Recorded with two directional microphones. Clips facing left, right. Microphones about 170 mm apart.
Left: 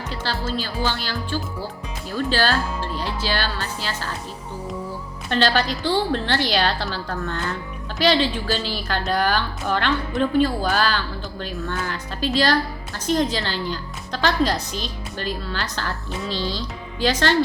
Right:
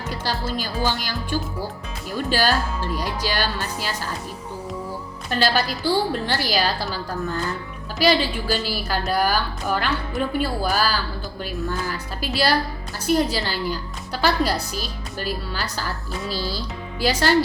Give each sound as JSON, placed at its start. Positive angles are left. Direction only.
{"t": 0.1, "sound": "a woman's voice", "side_deg": -15}
{"t": 5.3, "sound": "a woman's voice", "side_deg": -10}